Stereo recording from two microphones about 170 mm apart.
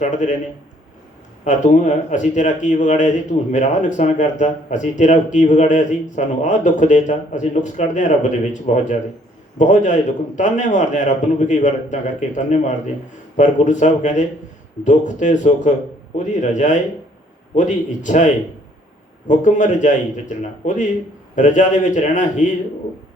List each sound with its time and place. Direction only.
0.0 s speech: 45° left (ahead or behind)
1.5 s speech: 45° left (ahead or behind)
19.3 s speech: 45° left (ahead or behind)